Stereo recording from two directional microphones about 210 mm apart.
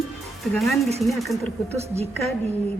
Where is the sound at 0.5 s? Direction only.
Centre (ahead or behind).